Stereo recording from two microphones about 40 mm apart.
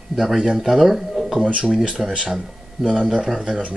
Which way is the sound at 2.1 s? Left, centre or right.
Centre.